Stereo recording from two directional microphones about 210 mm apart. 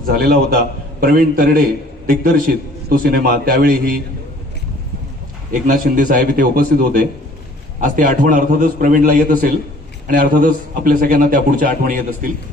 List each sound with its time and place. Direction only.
0.0 s a man's voice: 45° right (ahead or behind)
5.5 s a man's voice: 40° right (ahead or behind)